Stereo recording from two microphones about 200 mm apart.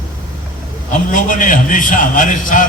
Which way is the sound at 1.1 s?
40° left (ahead or behind).